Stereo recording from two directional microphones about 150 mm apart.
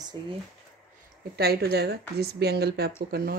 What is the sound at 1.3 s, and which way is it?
A woman's voice, 90° right.